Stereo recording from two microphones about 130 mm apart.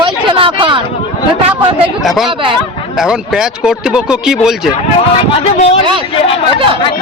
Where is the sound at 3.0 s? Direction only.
5° right (ahead or behind).